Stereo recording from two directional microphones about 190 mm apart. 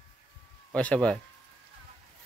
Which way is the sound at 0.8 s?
5° left (ahead or behind).